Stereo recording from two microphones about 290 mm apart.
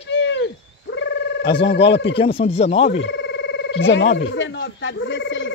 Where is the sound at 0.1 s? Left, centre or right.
Left.